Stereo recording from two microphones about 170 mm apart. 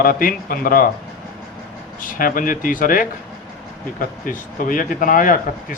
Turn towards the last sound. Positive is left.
turn(degrees=50)  # may be behind; listen again after turning